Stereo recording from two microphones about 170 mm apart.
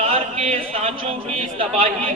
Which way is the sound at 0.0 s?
35° right (ahead or behind).